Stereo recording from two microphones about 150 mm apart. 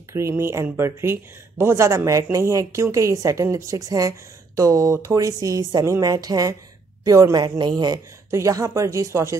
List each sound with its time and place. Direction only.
0.1 s speech: 20° right (ahead or behind)